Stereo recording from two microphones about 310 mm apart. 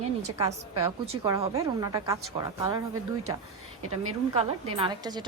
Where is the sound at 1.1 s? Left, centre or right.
Centre.